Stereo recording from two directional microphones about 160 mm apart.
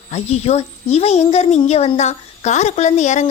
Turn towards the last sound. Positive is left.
turn(degrees=45)  # may be behind; listen again after turning